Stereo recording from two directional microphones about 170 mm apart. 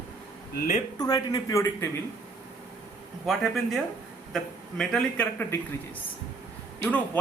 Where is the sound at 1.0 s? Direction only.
20° left (ahead or behind).